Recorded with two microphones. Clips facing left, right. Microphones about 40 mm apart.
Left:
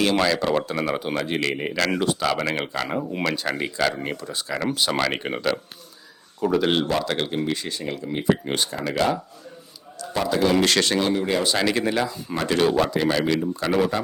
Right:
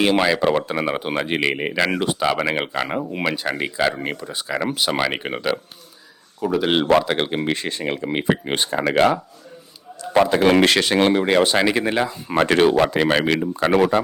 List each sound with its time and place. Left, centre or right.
0.0 s speech: right; by 6.7 s centre
7.0 s speech: right
7.4 s speech: right
8.2 s speech: right
10.0 s a man's voice: right
10.7 s speech: centre
10.9 s speech: right
11.4 s speech: right
12.3 s speech: right